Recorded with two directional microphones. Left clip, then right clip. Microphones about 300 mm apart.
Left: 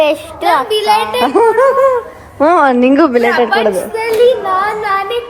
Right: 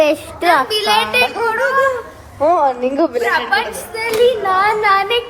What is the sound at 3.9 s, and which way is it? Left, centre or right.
A woman's voice, centre.